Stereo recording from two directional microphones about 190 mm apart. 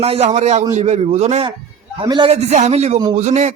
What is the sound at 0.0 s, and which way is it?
A man's voice, 35° right (ahead or behind).